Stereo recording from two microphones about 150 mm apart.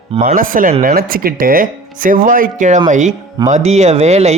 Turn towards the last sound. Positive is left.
turn(degrees=-45)  # may be behind; listen again after turning